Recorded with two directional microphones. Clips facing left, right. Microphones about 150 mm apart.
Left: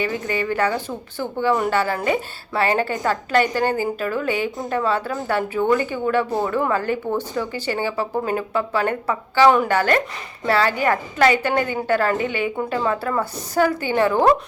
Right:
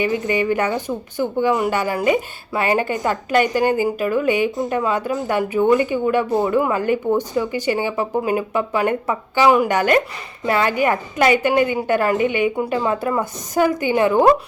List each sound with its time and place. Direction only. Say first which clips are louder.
0.0 s speech: right 4 dB; 15° right (ahead or behind)